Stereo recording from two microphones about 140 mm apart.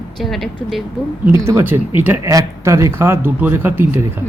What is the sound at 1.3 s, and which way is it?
A man's voice, 20° right (ahead or behind).